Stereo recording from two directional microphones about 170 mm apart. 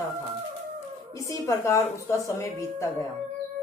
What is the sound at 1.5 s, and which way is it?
Speech, 15° left (ahead or behind).